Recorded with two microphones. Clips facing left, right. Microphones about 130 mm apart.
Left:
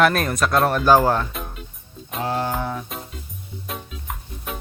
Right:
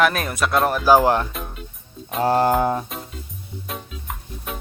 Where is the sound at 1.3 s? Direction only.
Centre (ahead or behind).